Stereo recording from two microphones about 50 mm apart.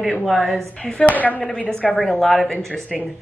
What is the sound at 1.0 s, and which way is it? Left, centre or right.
Speech, left.